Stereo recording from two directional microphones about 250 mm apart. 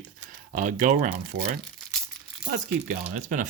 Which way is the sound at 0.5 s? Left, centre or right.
Right.